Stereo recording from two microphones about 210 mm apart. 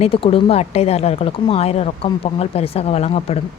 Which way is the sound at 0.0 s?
25° left (ahead or behind).